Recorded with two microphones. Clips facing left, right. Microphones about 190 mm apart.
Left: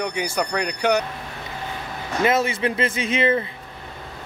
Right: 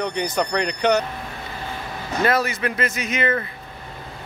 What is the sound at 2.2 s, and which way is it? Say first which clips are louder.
Speech: left 1 dB; 25° left (ahead or behind).